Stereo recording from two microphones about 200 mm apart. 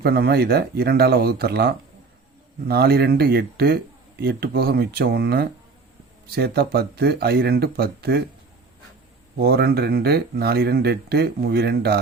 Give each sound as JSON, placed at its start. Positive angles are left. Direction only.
{"t": 0.0, "sound": "speech", "side_deg": -50}
{"t": 9.4, "sound": "speech", "side_deg": -50}